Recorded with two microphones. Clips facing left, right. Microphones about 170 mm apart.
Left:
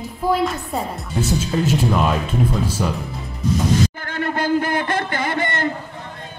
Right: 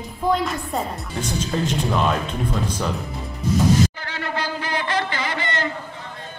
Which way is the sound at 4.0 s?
50° left (ahead or behind).